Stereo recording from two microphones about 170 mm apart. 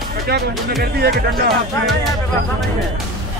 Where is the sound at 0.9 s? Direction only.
65° right (ahead or behind).